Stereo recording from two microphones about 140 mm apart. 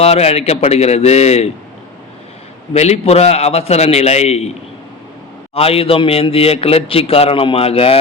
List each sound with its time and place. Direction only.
0.0 s a man's voice: 50° left (ahead or behind)
2.7 s a man's voice: 50° left (ahead or behind)
5.5 s a man's voice: 45° left (ahead or behind)